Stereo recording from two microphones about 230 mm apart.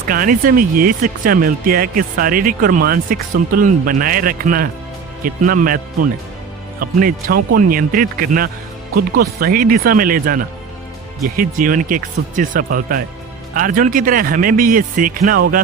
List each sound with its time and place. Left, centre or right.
0.1 s speech: right